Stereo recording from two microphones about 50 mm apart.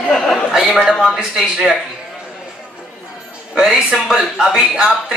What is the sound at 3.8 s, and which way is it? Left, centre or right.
Speech, centre.